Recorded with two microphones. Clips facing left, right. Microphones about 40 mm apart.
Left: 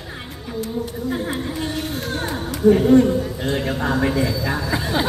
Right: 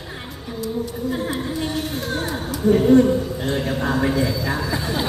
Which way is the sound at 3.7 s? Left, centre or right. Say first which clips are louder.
Even; centre.